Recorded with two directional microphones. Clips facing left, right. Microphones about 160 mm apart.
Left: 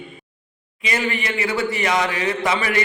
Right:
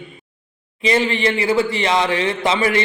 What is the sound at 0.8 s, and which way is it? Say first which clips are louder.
A man's voice: right 6 dB; 30° right (ahead or behind).